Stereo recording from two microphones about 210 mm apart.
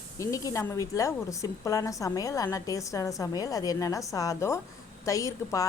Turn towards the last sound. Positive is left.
turn(degrees=15)  # may be behind; listen again after turning